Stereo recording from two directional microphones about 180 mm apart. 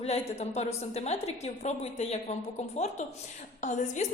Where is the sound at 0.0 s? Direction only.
35° left (ahead or behind).